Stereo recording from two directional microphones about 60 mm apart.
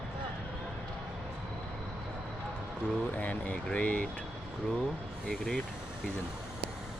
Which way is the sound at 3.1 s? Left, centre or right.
Left.